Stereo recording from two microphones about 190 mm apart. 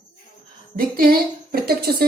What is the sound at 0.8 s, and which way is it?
A woman's voice, 50° right (ahead or behind).